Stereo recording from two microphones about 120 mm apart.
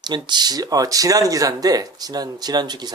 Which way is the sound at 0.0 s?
35° right (ahead or behind).